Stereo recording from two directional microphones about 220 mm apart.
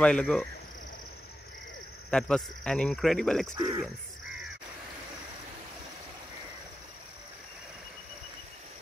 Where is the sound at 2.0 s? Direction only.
5° left (ahead or behind).